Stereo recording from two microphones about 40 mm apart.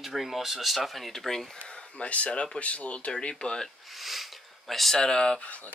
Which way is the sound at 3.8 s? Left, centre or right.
Centre.